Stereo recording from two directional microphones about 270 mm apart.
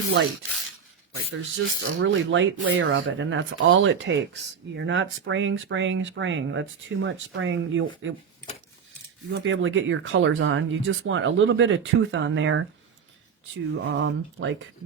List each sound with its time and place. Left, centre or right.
1.3 s speech: right
9.3 s speech: right
13.8 s speech: right